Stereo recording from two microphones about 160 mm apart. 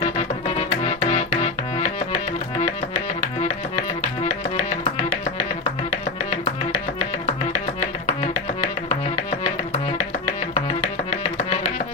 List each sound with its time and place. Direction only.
0.0 s music: 40° left (ahead or behind)